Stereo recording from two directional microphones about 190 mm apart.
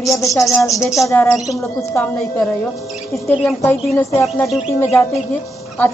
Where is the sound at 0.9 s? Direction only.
15° left (ahead or behind).